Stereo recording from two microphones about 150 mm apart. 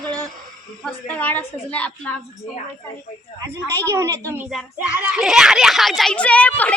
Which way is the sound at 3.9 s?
20° right (ahead or behind).